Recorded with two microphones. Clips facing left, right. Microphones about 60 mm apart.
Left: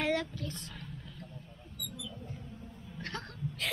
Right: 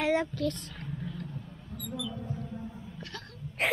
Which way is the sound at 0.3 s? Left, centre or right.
Right.